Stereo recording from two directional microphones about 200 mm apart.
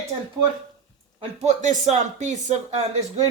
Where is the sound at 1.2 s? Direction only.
35° right (ahead or behind).